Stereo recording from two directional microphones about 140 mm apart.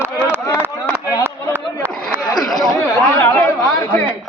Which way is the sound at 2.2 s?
30° left (ahead or behind).